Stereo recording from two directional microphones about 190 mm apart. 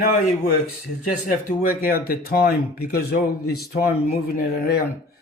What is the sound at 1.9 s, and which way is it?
Speech, 50° left (ahead or behind).